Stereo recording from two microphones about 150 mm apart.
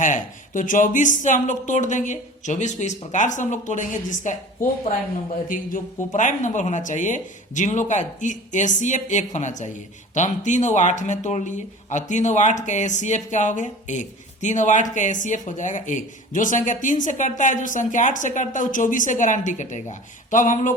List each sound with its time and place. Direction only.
0.0 s speech: 60° left (ahead or behind)
5.5 s speech: 65° left (ahead or behind)